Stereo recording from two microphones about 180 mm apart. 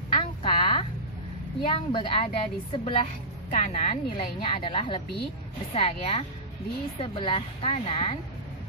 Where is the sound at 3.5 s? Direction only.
40° left (ahead or behind).